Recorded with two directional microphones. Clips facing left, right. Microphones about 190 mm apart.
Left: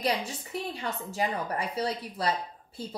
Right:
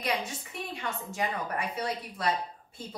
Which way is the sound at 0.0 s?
30° left (ahead or behind).